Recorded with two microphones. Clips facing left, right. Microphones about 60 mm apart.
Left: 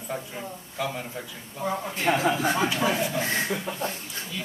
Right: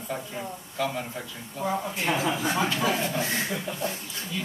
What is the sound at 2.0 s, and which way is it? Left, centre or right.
Speech, left.